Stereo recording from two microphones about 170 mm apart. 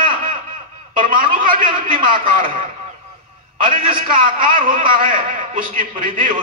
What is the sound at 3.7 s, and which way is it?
A man's voice, 55° right (ahead or behind).